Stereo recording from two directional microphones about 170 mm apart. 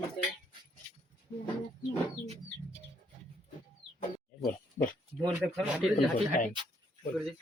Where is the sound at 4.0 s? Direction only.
50° left (ahead or behind).